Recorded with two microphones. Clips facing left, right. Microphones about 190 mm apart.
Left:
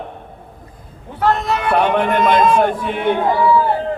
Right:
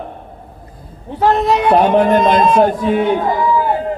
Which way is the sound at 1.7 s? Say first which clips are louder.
Right 4 dB; 40° right (ahead or behind).